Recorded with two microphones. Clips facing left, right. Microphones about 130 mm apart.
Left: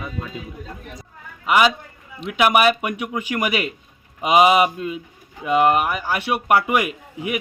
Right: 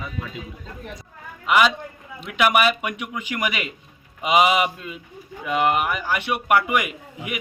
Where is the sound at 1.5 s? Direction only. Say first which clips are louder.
Left 1 dB; 5° left (ahead or behind).